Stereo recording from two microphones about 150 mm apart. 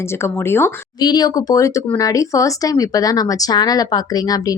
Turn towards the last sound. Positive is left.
turn(degrees=25)  # may be behind; listen again after turning